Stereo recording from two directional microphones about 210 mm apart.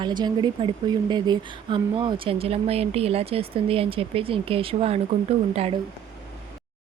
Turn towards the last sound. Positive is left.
turn(degrees=-30)  # may be behind; listen again after turning